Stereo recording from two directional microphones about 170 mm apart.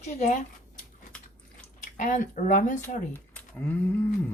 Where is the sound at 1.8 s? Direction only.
50° left (ahead or behind).